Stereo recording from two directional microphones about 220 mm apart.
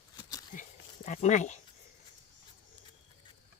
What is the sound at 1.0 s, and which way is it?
Speech, 35° left (ahead or behind).